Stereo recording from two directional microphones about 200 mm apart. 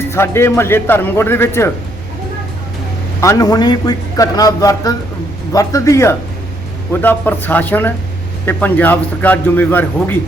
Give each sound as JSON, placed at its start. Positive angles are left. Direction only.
{"t": 0.1, "sound": "a man's voice", "side_deg": 10}
{"t": 3.2, "sound": "a man's voice", "side_deg": 15}